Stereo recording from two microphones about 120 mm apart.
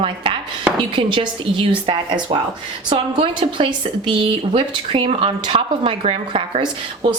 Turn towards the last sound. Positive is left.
turn(degrees=-45)  # may be behind; listen again after turning